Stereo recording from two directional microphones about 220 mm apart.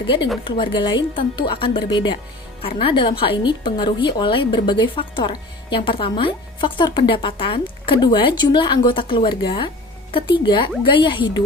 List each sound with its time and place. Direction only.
0.4 s a woman's voice: 20° left (ahead or behind)